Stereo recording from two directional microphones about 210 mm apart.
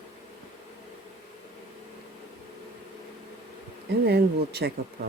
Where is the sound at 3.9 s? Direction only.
50° right (ahead or behind).